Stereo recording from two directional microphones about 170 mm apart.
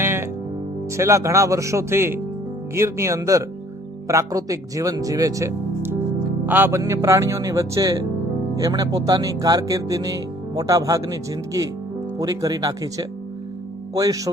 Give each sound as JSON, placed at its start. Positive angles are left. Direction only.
{"t": 0.0, "sound": "music", "side_deg": -15}
{"t": 0.9, "sound": "speech", "side_deg": -15}